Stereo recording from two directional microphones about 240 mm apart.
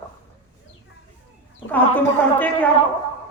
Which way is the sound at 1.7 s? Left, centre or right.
Centre.